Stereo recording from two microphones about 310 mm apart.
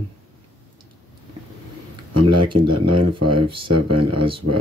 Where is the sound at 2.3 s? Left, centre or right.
Centre.